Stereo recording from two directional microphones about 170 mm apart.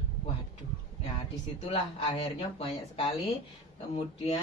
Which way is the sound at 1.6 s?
35° left (ahead or behind).